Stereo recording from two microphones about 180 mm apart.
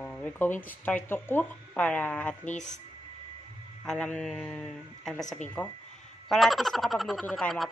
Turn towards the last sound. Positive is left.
turn(degrees=5)  # may be behind; listen again after turning